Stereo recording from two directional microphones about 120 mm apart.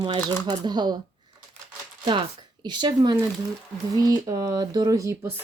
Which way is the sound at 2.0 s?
40° right (ahead or behind).